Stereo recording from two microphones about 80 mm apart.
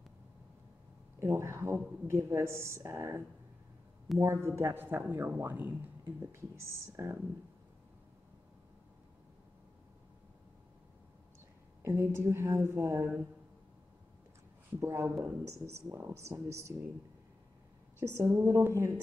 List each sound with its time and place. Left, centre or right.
1.2 s speech: right
4.7 s speech: right
11.8 s speech: right
14.8 s speech: right
17.9 s speech: right